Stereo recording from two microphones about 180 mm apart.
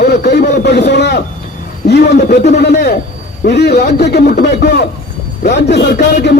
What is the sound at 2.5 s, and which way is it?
A man's voice, 65° left (ahead or behind).